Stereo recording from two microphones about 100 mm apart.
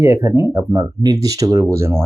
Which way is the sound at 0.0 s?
25° right (ahead or behind).